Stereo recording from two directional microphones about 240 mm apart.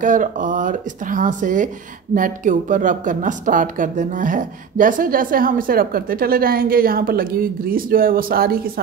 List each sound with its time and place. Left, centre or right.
0.0 s speech: right